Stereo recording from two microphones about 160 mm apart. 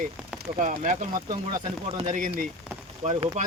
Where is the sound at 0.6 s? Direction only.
50° right (ahead or behind).